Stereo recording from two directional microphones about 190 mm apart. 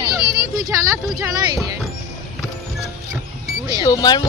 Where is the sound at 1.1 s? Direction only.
15° right (ahead or behind).